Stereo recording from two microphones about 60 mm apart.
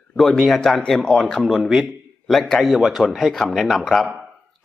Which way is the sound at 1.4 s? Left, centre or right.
Centre.